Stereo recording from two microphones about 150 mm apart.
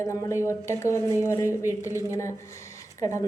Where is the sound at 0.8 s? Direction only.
15° right (ahead or behind).